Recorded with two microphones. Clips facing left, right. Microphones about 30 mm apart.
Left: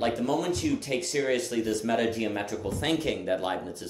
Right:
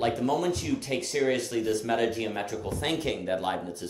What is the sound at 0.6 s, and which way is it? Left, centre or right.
Speech, centre.